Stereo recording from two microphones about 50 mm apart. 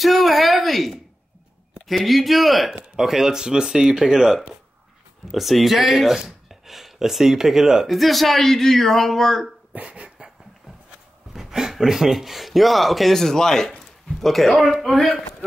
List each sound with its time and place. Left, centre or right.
0.0 s a sound: centre
1.9 s speech: centre
9.8 s dog: right
11.3 s speech: centre